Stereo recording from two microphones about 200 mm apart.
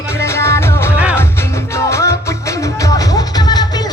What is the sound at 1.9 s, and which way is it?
Music, 15° left (ahead or behind).